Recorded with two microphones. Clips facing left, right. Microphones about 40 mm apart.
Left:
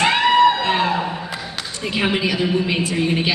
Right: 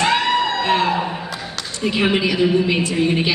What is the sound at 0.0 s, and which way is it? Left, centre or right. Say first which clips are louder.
Music: left 3 dB; centre.